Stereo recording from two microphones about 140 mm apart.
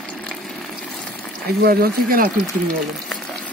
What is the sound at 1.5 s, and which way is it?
Speech, 90° right.